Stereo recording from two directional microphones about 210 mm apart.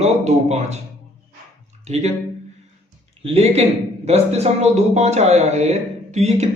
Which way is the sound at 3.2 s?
30° right (ahead or behind).